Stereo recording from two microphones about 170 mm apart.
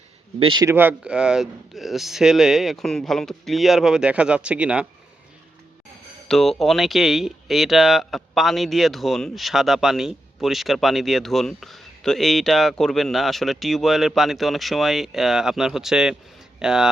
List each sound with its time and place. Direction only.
0.3 s speech: 30° right (ahead or behind)
0.6 s speech: 15° right (ahead or behind)
6.2 s speech: centre (ahead or behind)